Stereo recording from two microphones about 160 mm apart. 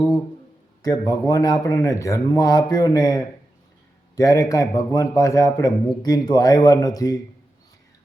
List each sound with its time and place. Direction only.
0.8 s a man's voice: 25° left (ahead or behind)